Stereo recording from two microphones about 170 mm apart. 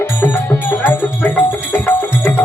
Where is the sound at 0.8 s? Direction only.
15° left (ahead or behind).